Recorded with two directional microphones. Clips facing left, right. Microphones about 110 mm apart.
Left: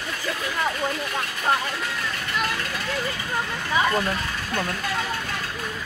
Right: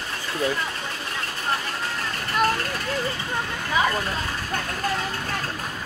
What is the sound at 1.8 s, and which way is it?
Speech, 40° right (ahead or behind).